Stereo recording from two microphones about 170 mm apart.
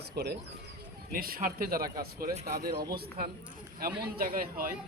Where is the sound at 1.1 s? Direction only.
55° right (ahead or behind).